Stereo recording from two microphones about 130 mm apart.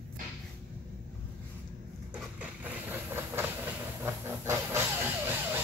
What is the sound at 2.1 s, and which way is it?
Train, 10° right (ahead or behind).